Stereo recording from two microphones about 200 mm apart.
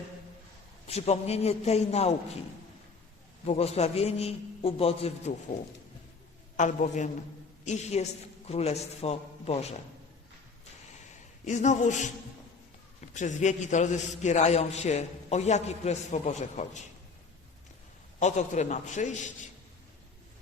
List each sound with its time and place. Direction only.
0.9 s a man's voice: 30° left (ahead or behind)
3.4 s a man's voice: 30° left (ahead or behind)
6.6 s a man's voice: 35° left (ahead or behind)
11.4 s a man's voice: 35° left (ahead or behind)
18.2 s a man's voice: 35° left (ahead or behind)